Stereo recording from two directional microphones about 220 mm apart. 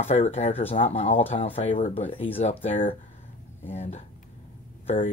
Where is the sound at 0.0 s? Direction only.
30° left (ahead or behind).